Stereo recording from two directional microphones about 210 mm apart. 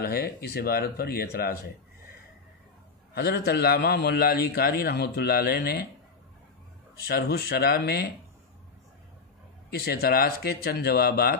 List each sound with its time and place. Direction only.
0.0 s a man's voice: 50° left (ahead or behind)
3.2 s a man's voice: 50° left (ahead or behind)
7.1 s a man's voice: 50° left (ahead or behind)
9.7 s a man's voice: 50° left (ahead or behind)